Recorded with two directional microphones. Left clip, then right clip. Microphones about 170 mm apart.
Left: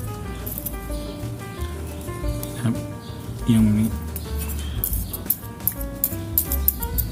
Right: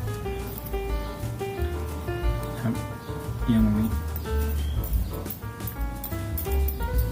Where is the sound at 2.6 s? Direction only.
20° left (ahead or behind).